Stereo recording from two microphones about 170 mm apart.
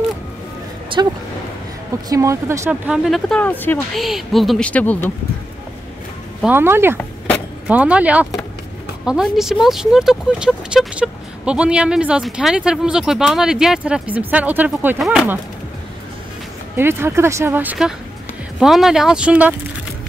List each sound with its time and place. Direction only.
0.9 s speech: 30° right (ahead or behind)
2.0 s speech: 20° right (ahead or behind); by 3.8 s 10° left (ahead or behind)
3.9 s speech: centre (ahead or behind)
6.4 s speech: 15° right (ahead or behind)
16.7 s speech: 15° right (ahead or behind)